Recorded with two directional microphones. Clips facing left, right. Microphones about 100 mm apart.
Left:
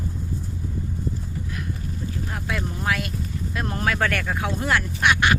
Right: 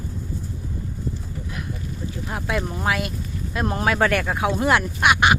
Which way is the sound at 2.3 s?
25° right (ahead or behind).